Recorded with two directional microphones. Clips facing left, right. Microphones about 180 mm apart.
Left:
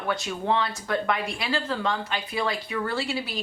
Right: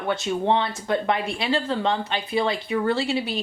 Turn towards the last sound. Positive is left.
turn(degrees=-25)  # may be behind; listen again after turning